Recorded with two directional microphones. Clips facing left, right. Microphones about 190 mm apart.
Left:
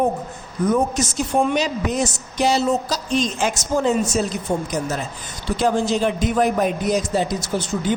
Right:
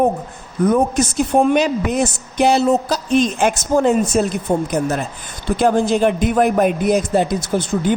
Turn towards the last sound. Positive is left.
turn(degrees=-55)  # may be behind; listen again after turning